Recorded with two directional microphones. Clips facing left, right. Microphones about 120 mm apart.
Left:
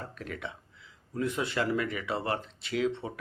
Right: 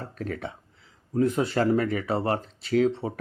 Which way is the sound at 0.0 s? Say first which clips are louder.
Right 6 dB; 40° right (ahead or behind).